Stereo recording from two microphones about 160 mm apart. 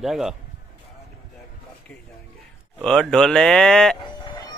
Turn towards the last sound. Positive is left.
turn(degrees=30)  # may be behind; listen again after turning